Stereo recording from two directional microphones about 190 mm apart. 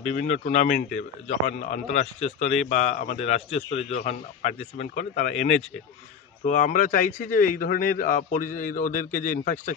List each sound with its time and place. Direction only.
0.0 s a man's voice: 40° left (ahead or behind)